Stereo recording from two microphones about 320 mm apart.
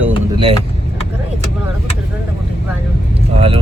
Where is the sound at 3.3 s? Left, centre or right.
Centre.